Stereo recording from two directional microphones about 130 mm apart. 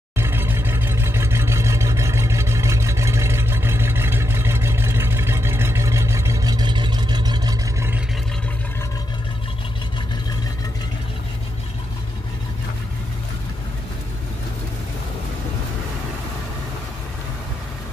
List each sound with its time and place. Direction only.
0.2 s vehicle: 15° right (ahead or behind); by 7.5 s 35° right (ahead or behind)